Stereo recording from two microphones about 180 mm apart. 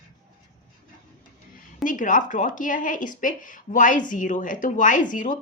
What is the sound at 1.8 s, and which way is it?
A woman's voice, 45° left (ahead or behind).